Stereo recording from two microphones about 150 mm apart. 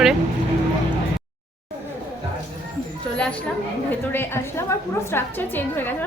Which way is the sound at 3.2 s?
5° left (ahead or behind).